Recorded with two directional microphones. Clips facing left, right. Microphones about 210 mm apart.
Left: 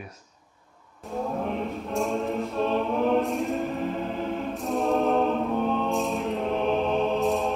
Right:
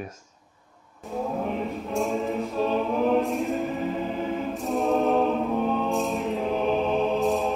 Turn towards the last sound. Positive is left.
turn(degrees=0)  # may be behind; listen again after turning